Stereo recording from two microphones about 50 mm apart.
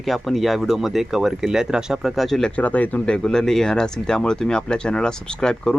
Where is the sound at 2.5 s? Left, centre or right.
Left.